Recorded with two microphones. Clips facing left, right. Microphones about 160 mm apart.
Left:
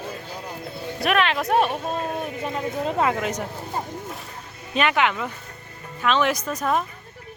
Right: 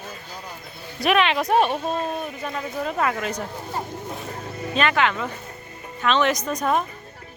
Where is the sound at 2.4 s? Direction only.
20° left (ahead or behind).